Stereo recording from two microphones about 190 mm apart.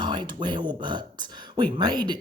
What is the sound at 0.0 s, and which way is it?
Speech, 25° right (ahead or behind).